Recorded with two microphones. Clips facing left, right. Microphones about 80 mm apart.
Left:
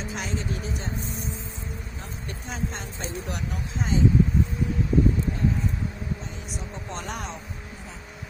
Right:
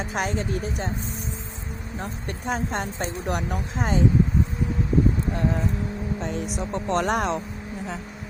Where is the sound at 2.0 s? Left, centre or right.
Right.